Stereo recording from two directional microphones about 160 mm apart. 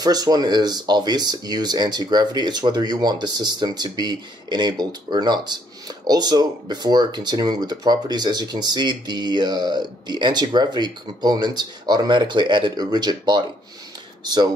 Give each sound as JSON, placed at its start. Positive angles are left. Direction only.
{"t": 0.0, "sound": "speech", "side_deg": -25}